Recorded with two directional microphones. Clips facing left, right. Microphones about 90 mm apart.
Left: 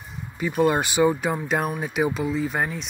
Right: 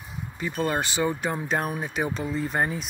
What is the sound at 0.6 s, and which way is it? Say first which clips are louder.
Speech: left 6 dB; 15° left (ahead or behind).